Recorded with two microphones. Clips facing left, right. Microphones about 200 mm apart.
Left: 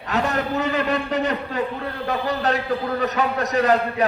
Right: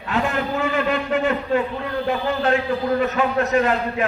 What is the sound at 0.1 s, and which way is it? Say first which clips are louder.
A man's voice: even; 40° left (ahead or behind).